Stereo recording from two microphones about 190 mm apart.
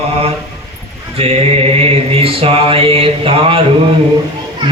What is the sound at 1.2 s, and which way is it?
Mantra, 30° right (ahead or behind).